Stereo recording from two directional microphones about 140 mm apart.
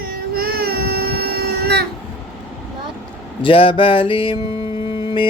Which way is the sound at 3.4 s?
40° left (ahead or behind).